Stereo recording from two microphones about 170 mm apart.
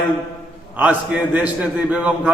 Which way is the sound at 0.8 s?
10° right (ahead or behind).